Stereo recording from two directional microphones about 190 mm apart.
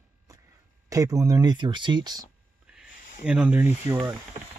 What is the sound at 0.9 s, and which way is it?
Speech, 15° right (ahead or behind).